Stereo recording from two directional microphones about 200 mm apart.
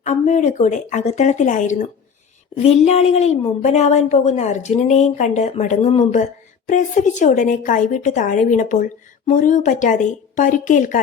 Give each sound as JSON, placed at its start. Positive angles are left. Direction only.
{"t": 0.0, "sound": "a woman's voice", "side_deg": 35}